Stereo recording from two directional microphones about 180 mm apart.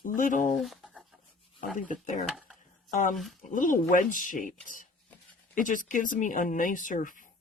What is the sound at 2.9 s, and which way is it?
Speech, 45° left (ahead or behind).